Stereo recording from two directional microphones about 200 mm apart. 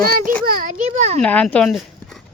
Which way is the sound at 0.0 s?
45° right (ahead or behind).